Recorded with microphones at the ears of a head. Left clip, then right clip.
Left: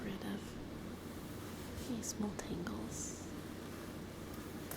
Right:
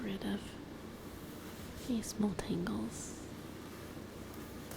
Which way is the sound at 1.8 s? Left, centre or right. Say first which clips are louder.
Right 6 dB; right.